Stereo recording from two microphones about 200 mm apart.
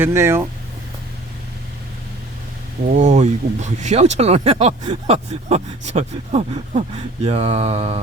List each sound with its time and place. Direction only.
0.0 s speech: 10° right (ahead or behind)
2.9 s speech: 35° right (ahead or behind)